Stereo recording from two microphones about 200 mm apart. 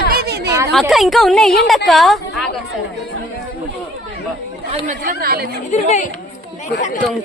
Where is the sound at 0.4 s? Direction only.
15° right (ahead or behind).